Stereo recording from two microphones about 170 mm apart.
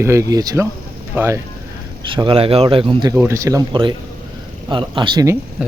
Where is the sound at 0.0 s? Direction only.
15° right (ahead or behind).